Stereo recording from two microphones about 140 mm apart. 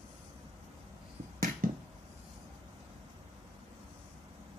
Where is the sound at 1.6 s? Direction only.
85° right.